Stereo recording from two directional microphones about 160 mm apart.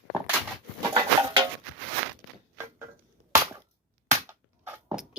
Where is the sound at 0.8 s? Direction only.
30° right (ahead or behind).